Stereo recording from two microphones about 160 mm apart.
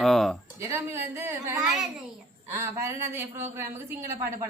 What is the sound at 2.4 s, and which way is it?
A woman's voice, 15° right (ahead or behind).